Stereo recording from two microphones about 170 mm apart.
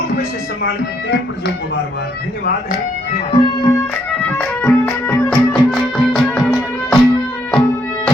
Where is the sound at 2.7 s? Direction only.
40° left (ahead or behind); by 3.9 s 20° left (ahead or behind).